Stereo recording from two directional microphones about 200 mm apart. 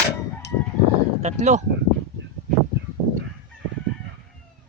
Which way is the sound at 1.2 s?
35° right (ahead or behind).